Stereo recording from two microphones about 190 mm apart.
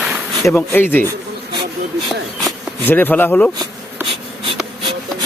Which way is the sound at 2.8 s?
10° left (ahead or behind).